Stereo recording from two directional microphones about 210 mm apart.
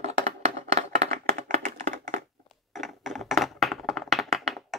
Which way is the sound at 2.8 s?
Centre (ahead or behind).